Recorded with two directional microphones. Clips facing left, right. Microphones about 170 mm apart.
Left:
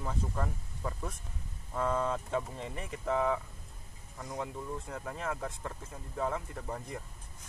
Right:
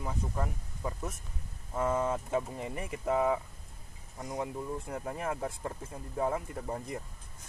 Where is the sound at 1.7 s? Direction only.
20° right (ahead or behind).